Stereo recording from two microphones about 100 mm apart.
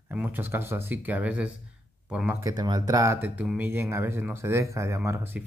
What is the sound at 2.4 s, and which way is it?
Speech, 40° right (ahead or behind).